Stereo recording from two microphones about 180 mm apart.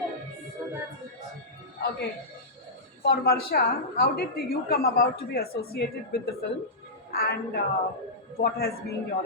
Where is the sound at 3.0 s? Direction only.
60° left (ahead or behind).